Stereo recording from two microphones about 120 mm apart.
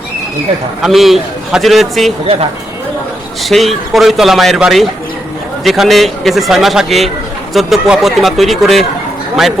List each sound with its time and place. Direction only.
0.8 s speech: centre (ahead or behind)
3.5 s speech: centre (ahead or behind)